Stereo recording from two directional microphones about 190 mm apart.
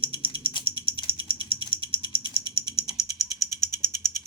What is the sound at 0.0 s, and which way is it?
Rattle, 25° right (ahead or behind).